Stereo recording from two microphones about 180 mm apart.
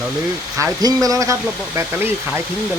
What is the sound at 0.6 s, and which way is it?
Speech, 20° right (ahead or behind).